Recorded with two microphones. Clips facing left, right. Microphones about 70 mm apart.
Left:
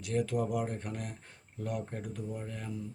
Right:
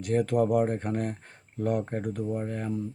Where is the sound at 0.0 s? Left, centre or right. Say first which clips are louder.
Right 7 dB; right.